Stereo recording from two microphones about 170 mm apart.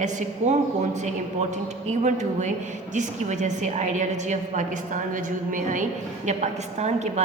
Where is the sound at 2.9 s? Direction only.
45° right (ahead or behind).